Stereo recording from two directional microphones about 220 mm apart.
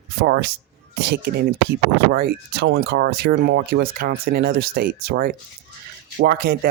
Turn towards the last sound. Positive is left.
turn(degrees=-40)  # may be behind; listen again after turning